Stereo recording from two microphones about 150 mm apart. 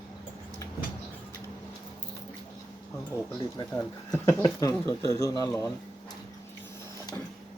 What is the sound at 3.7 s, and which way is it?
Speech, 15° left (ahead or behind).